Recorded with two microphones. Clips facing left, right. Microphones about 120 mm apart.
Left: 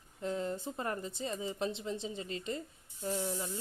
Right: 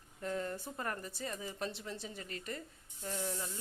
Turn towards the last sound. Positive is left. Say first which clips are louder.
# left 4 dB
turn(degrees=20)  # may be behind; listen again after turning